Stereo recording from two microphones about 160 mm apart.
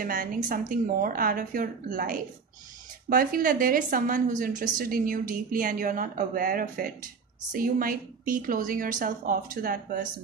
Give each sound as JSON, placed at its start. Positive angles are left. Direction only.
{"t": 0.0, "sound": "a woman's voice", "side_deg": -60}